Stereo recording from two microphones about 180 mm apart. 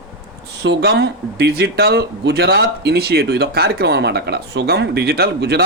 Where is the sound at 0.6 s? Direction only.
65° right (ahead or behind).